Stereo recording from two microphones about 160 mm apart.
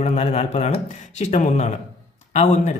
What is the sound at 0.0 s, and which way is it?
Speech, 45° left (ahead or behind).